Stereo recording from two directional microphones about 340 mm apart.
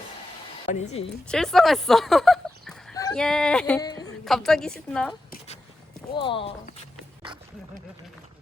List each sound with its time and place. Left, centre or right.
0.8 s speech: centre
1.3 s speech: centre
6.1 s speech: centre